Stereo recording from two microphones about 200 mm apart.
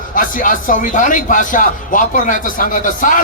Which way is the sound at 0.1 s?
45° left (ahead or behind).